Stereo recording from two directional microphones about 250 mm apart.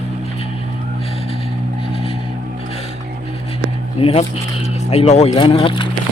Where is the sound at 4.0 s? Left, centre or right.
Left.